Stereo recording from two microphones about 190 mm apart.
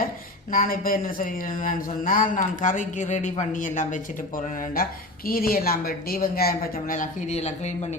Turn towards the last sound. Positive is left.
turn(degrees=35)  # may be behind; listen again after turning